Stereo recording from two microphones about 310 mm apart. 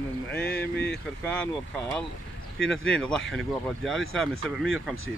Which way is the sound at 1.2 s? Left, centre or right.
Centre.